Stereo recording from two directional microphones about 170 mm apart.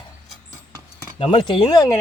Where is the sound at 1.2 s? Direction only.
30° left (ahead or behind).